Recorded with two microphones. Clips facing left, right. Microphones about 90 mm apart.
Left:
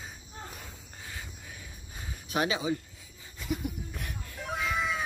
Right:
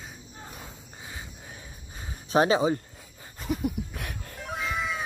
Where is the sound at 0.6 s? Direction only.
20° right (ahead or behind).